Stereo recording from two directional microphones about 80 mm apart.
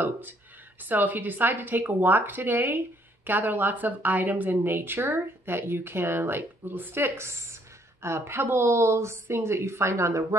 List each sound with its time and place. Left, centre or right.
0.7 s a woman's voice: right